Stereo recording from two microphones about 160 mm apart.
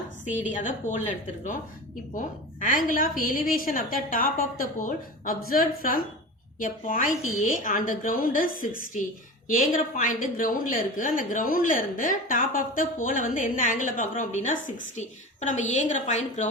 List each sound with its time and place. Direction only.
0.5 s a woman's voice: 55° left (ahead or behind)